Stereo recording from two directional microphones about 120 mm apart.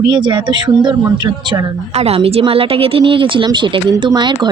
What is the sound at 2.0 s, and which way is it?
A woman's voice, 60° right (ahead or behind).